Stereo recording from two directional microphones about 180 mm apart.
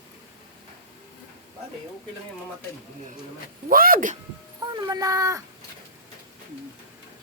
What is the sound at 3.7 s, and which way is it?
Speech, 50° right (ahead or behind).